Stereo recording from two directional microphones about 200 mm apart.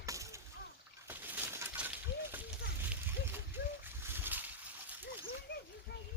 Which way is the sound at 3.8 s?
10° right (ahead or behind).